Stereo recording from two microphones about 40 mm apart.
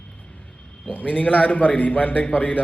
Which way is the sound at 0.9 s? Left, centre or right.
Left.